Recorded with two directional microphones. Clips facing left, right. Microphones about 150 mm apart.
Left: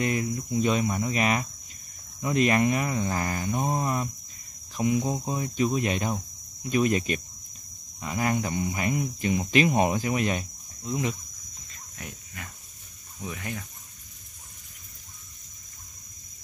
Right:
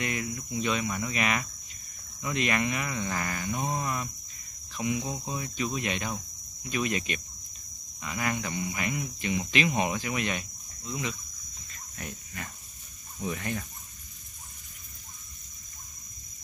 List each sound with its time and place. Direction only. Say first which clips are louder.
0.0 s speech: left 6 dB; 35° left (ahead or behind)
4.7 s cricket: left 6 dB; 45° left (ahead or behind)
5.1 s speech: left 5 dB; 35° left (ahead or behind)
10.9 s cricket: left 5 dB; 50° left (ahead or behind)
13.2 s speech: right 3 dB; 5° left (ahead or behind)